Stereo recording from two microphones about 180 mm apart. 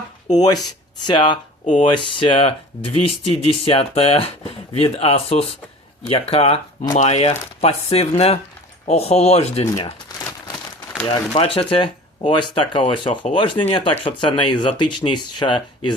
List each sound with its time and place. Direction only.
0.3 s speech: 20° left (ahead or behind)
9.6 s speech: 20° left (ahead or behind)
11.1 s speech: 30° left (ahead or behind)